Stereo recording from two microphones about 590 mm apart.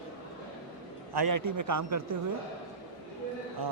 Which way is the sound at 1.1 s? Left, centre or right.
Right.